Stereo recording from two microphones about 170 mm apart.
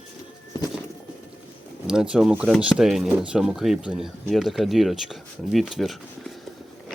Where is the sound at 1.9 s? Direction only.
5° right (ahead or behind).